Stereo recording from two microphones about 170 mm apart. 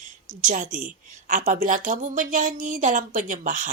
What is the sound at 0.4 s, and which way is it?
Speech, 50° right (ahead or behind).